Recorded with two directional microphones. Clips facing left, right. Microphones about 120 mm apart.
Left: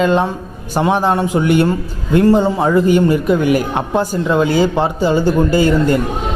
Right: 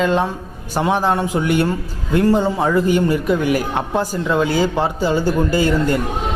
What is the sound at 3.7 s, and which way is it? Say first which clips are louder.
Speech: left 3 dB; 20° left (ahead or behind).